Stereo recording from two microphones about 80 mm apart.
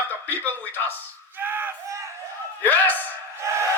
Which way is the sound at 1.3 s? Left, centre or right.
Right.